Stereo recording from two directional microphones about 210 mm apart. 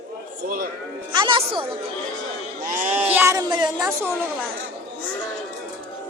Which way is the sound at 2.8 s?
10° right (ahead or behind).